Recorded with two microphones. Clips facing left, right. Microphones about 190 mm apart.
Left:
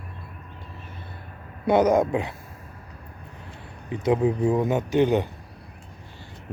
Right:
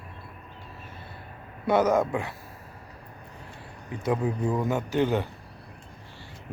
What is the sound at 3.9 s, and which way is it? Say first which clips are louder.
Speech: left 5 dB; 20° left (ahead or behind).